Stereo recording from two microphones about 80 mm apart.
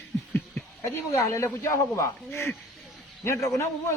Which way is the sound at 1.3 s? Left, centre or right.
Left.